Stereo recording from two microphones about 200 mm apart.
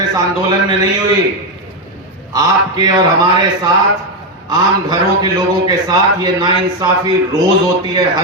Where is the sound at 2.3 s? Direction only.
20° right (ahead or behind).